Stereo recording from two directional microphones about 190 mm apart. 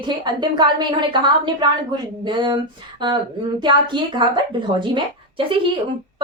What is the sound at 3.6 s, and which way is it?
Speech, 25° right (ahead or behind).